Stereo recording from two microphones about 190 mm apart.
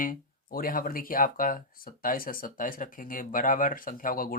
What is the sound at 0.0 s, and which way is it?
Speech, 45° left (ahead or behind).